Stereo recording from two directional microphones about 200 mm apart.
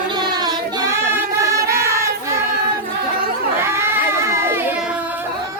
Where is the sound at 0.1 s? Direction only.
20° right (ahead or behind).